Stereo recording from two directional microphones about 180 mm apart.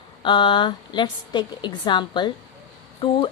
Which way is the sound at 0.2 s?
25° left (ahead or behind).